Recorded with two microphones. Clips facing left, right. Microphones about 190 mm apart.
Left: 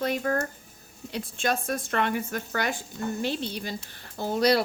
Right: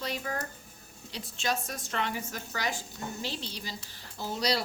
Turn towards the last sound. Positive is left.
turn(degrees=55)  # may be behind; listen again after turning